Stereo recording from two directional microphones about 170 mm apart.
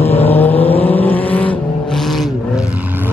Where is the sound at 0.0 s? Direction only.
35° left (ahead or behind).